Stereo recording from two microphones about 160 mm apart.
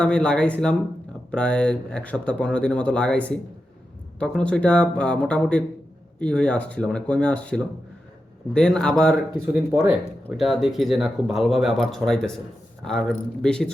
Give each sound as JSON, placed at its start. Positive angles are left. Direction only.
{"t": 0.0, "sound": "speech", "side_deg": 5}
{"t": 10.3, "sound": "speech", "side_deg": 0}